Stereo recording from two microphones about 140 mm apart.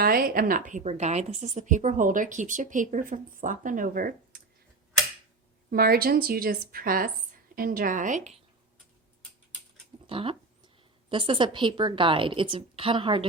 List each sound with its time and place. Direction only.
0.0 s a woman's voice: 90° right
5.7 s a woman's voice: 90° right; by 8.4 s 55° right (ahead or behind)
10.1 s a woman's voice: 40° right (ahead or behind)